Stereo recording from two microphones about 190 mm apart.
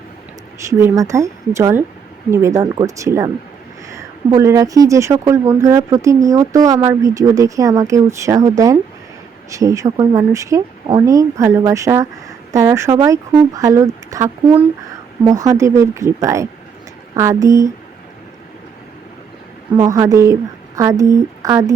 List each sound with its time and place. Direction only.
0.7 s speech: 15° right (ahead or behind)
19.7 s speech: 20° right (ahead or behind)